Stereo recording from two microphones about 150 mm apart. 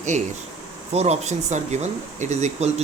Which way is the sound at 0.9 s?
45° right (ahead or behind).